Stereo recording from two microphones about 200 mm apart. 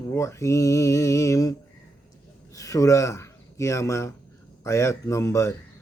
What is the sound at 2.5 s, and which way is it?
Speech, 15° left (ahead or behind).